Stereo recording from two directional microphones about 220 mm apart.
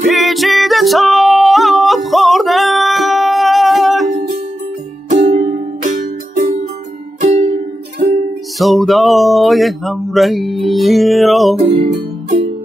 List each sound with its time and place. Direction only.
0.0 s music: centre (ahead or behind)
5.1 s music: 35° right (ahead or behind)
8.5 s a sound: centre (ahead or behind)